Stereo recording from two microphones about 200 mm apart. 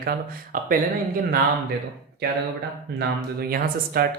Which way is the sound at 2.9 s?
50° right (ahead or behind).